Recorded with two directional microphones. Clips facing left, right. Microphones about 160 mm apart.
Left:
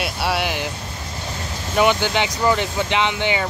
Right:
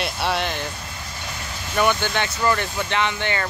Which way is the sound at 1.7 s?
15° left (ahead or behind).